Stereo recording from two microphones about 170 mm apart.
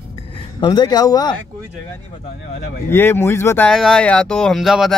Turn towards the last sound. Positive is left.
turn(degrees=0)  # may be behind; listen again after turning